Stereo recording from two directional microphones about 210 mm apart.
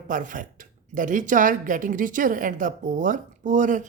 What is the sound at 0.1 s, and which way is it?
Speech, 40° right (ahead or behind).